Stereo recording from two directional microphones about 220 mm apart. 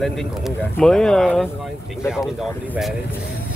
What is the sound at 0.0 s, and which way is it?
Speech, centre (ahead or behind).